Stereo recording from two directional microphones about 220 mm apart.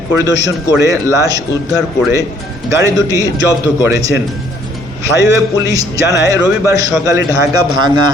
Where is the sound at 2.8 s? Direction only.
15° right (ahead or behind).